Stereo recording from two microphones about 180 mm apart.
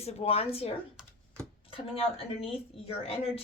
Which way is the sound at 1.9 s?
30° left (ahead or behind).